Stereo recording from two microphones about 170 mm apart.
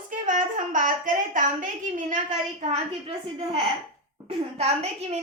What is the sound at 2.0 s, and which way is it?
A woman's voice, 50° right (ahead or behind).